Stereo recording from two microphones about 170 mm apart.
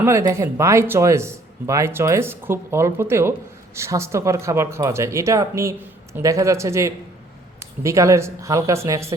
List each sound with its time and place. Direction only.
0.0 s speech: 15° right (ahead or behind)